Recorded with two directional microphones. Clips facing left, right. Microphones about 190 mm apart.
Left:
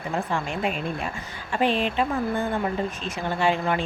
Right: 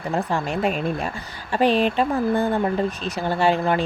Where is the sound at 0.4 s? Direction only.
40° right (ahead or behind).